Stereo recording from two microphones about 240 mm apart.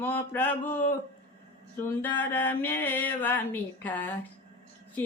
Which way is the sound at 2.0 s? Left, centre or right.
Centre.